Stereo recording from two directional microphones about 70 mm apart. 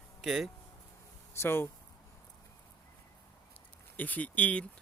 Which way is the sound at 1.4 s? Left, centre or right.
Left.